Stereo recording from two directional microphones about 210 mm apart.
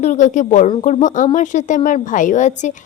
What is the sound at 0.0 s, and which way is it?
A woman's voice, 35° left (ahead or behind).